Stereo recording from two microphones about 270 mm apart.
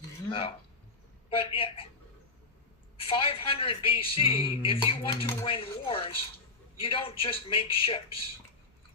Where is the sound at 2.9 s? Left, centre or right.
Left.